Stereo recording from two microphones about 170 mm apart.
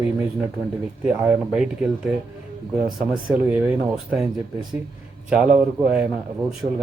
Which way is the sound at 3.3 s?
10° right (ahead or behind).